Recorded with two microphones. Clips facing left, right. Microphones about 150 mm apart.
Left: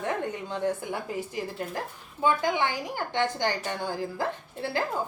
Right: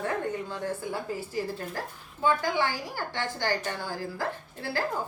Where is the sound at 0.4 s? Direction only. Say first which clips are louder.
Left 4 dB; 20° left (ahead or behind).